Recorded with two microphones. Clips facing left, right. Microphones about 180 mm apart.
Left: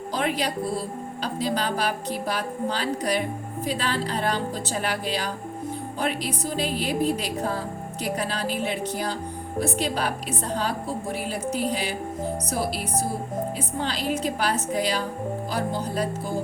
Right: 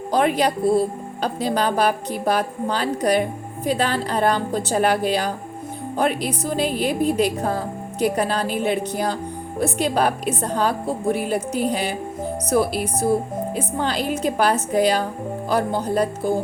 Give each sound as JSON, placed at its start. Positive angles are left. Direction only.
{"t": 0.1, "sound": "speech", "side_deg": -55}